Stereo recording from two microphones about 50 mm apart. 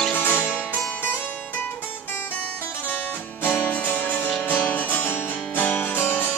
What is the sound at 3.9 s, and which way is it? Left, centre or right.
Music, left.